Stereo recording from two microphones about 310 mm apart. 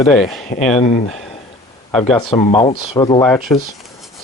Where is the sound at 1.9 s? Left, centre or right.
Centre.